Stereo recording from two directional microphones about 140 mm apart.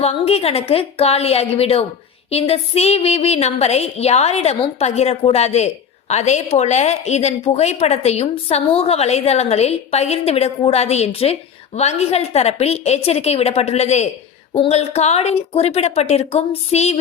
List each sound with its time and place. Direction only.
0.0 s a woman's voice: 45° left (ahead or behind)